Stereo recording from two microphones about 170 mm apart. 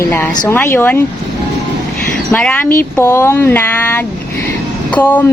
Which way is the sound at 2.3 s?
10° left (ahead or behind).